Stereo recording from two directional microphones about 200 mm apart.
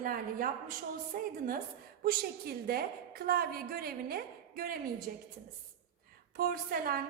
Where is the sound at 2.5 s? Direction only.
50° right (ahead or behind).